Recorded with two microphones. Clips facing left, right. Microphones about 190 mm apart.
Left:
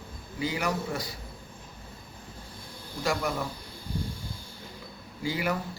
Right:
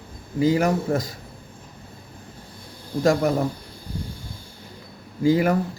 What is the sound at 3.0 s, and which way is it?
Speech, 45° right (ahead or behind).